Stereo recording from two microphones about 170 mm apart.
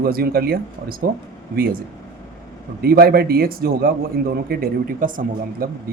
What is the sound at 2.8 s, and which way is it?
Speech, 65° right (ahead or behind).